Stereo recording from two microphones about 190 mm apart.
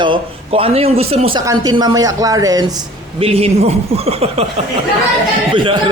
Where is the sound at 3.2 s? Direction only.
30° right (ahead or behind).